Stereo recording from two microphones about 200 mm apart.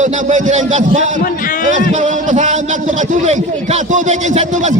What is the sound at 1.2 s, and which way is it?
Speech, 45° left (ahead or behind).